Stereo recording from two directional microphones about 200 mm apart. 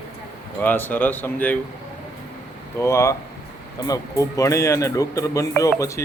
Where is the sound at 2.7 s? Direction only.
15° left (ahead or behind).